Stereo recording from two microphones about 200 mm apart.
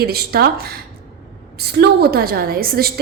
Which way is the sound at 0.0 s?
50° right (ahead or behind).